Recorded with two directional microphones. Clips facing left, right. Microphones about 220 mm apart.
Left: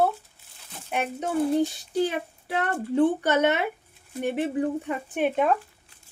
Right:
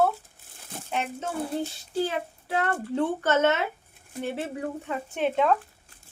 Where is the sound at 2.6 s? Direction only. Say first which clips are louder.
Left 4 dB; 15° left (ahead or behind).